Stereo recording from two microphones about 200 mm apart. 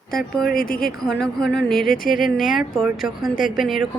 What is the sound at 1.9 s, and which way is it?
Speech, 45° left (ahead or behind).